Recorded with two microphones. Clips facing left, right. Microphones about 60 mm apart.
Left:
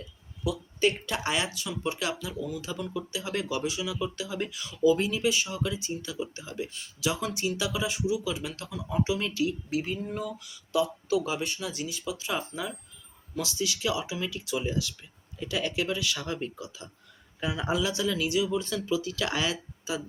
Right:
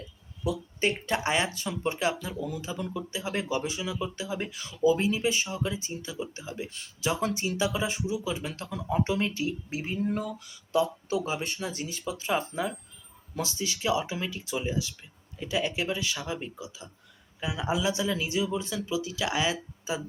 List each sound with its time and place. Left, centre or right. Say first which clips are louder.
0.4 s speech: left 1 dB; right
10.1 s speech: right 3 dB; right
14.5 s speech: left 1 dB; centre
16.1 s speech: left 1 dB; centre; by 18.6 s right
18.6 s speech: left 2 dB; centre
19.9 s speech: right 1 dB; right